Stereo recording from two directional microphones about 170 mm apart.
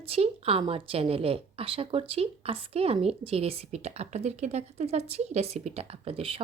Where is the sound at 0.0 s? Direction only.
35° right (ahead or behind).